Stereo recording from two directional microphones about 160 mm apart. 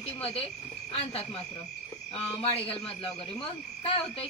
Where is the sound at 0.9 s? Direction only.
40° left (ahead or behind).